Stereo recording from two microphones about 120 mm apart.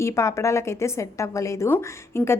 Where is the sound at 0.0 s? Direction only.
25° left (ahead or behind).